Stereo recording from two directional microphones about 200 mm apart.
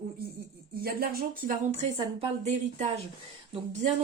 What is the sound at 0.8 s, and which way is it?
Speech, 50° right (ahead or behind).